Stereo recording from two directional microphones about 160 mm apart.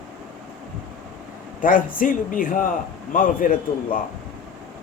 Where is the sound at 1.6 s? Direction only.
60° left (ahead or behind).